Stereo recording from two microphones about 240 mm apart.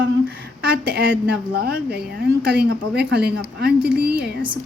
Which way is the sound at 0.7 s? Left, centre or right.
Right.